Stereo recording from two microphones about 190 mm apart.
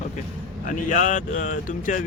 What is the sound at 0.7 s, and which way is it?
Speech, 40° left (ahead or behind).